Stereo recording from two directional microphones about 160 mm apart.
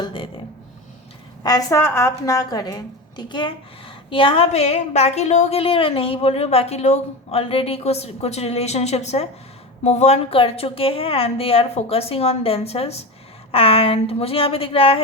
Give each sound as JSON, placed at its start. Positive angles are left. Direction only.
{"t": 0.0, "sound": "a woman's voice", "side_deg": 30}
{"t": 1.5, "sound": "a woman's voice", "side_deg": 20}